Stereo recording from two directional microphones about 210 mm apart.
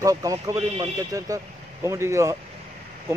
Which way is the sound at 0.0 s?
15° right (ahead or behind).